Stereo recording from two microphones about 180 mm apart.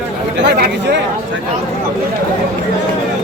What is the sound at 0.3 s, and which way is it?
Speech, 70° right (ahead or behind).